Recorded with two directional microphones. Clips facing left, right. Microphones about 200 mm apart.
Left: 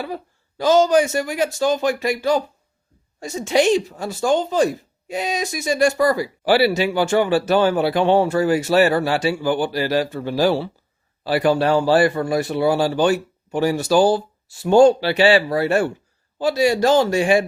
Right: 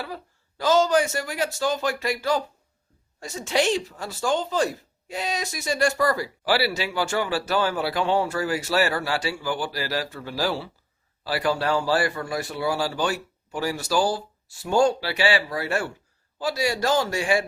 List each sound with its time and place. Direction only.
0.0 s a man's voice: 20° left (ahead or behind)